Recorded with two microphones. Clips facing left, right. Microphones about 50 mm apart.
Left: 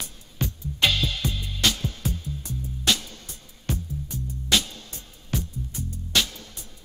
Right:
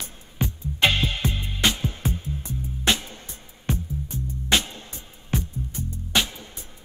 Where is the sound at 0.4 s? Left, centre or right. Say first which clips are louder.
Right 2 dB; right.